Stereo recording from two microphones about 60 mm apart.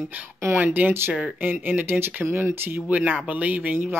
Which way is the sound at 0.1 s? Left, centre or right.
Right.